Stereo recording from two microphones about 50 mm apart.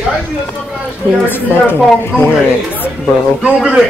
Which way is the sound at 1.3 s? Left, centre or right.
Left.